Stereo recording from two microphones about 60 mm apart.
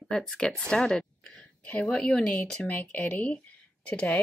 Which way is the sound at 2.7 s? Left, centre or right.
Left.